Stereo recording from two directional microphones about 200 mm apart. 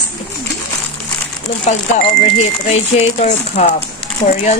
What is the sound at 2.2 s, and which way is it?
A woman's voice, 35° left (ahead or behind).